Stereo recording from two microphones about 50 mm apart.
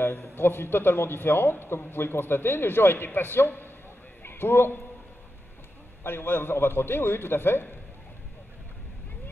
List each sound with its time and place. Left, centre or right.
0.4 s a man's voice: left
4.2 s a sound: left
6.0 s a man's voice: left